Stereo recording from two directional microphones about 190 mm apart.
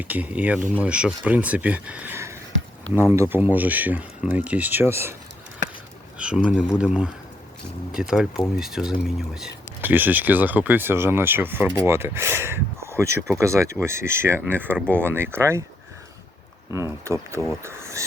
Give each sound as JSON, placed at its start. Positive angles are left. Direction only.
{"t": 0.0, "sound": "speech", "side_deg": -10}
{"t": 6.1, "sound": "speech", "side_deg": -5}
{"t": 16.7, "sound": "speech", "side_deg": -15}